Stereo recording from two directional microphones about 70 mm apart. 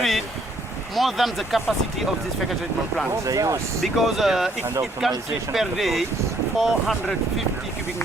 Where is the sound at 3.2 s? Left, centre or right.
Right.